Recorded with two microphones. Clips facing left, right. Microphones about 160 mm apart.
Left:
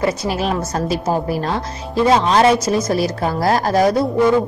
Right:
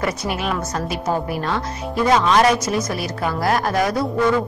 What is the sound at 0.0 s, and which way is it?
A man's voice, 30° left (ahead or behind).